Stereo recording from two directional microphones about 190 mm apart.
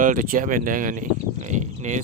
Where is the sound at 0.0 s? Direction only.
45° right (ahead or behind).